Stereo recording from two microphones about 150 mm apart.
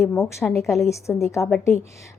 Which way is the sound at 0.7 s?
20° left (ahead or behind).